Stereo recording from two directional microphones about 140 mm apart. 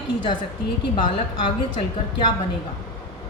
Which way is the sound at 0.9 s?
35° left (ahead or behind).